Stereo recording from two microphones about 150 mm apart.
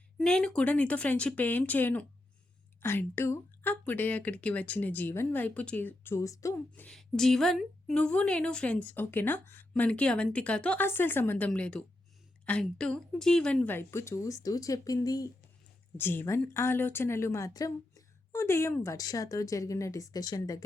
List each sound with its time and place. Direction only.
0.2 s a woman's voice: 5° left (ahead or behind)
6.8 s a woman's voice: 5° left (ahead or behind); by 20.7 s 25° left (ahead or behind)